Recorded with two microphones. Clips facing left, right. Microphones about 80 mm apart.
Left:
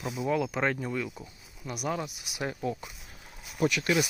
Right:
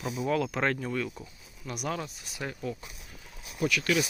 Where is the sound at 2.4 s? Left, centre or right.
Left.